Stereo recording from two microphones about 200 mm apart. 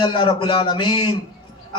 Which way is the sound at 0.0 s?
25° left (ahead or behind).